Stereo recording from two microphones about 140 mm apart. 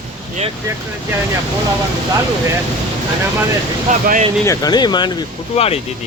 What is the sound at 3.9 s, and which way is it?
Speech, 65° right (ahead or behind).